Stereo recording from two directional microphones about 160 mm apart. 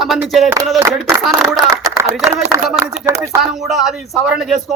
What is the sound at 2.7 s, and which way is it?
A man's voice, 5° right (ahead or behind).